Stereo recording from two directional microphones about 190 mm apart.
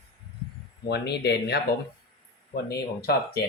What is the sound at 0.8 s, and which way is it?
Speech, 60° left (ahead or behind).